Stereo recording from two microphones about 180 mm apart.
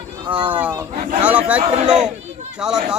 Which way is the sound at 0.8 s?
10° right (ahead or behind).